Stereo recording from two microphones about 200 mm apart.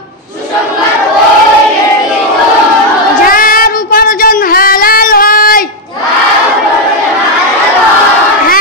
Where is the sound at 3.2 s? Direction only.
45° left (ahead or behind).